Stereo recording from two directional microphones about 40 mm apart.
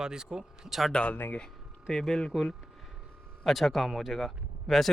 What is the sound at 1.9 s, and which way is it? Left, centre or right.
Speech, centre.